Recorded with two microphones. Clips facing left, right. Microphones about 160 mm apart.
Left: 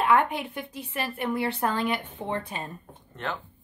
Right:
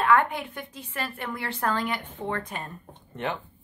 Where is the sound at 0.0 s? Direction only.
20° left (ahead or behind).